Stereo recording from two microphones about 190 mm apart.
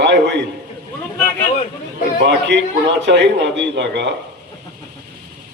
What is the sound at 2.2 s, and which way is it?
A man's voice, 65° right (ahead or behind).